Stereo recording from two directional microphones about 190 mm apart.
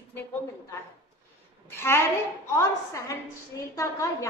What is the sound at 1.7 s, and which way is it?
Speech, 10° left (ahead or behind).